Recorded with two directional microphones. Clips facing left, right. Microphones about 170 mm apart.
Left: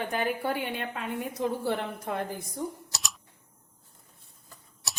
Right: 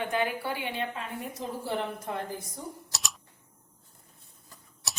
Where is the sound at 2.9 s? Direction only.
Centre (ahead or behind).